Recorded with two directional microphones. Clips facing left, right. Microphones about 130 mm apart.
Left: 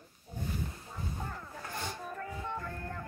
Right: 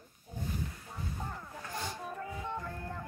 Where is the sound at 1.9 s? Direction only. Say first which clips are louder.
Even; 10° right (ahead or behind).